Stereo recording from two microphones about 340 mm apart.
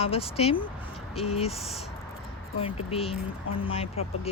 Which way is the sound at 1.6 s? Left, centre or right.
Centre.